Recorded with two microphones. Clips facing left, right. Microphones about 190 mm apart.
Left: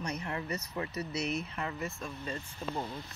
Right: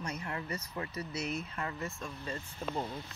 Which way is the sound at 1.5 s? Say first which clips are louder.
Left 1 dB; 20° left (ahead or behind).